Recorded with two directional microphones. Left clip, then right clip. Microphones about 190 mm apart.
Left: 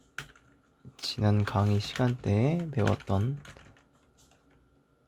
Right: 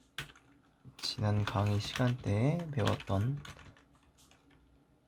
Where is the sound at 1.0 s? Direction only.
35° left (ahead or behind).